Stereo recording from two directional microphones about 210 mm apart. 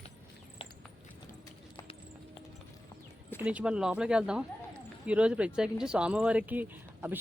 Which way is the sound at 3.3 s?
5° right (ahead or behind).